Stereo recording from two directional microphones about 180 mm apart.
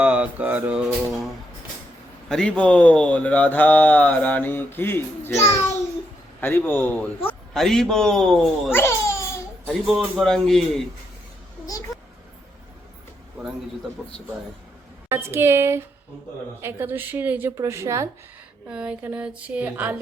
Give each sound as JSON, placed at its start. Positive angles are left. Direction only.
{"t": 0.0, "sound": "speech", "side_deg": -5}
{"t": 2.3, "sound": "a man's voice", "side_deg": 5}
{"t": 8.7, "sound": "baby cry", "side_deg": 15}
{"t": 10.0, "sound": "a man's voice", "side_deg": 0}
{"t": 15.1, "sound": "speech", "side_deg": -15}
{"t": 18.7, "sound": "speech", "side_deg": -5}